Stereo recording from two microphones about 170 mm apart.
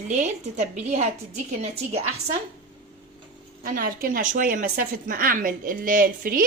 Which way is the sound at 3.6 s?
60° right (ahead or behind).